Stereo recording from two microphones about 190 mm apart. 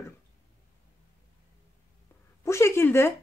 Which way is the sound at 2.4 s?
15° left (ahead or behind).